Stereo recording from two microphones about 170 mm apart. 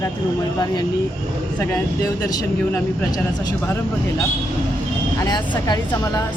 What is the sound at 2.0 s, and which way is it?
Speech, 20° left (ahead or behind).